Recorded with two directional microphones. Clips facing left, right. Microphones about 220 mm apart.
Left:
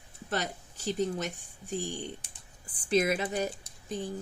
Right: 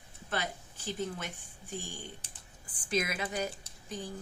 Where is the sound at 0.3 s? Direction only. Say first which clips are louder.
Left 3 dB; 40° left (ahead or behind).